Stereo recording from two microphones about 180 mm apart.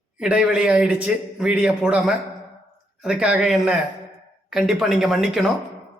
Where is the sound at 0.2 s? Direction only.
5° right (ahead or behind).